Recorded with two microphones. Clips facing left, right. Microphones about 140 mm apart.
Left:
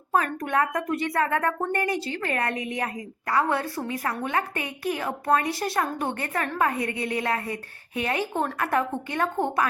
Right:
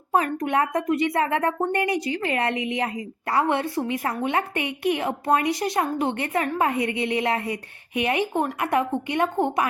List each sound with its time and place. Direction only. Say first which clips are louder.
0.1 s a woman's voice: right 2 dB; 20° right (ahead or behind)